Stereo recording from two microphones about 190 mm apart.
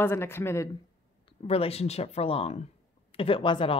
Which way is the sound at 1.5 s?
30° left (ahead or behind).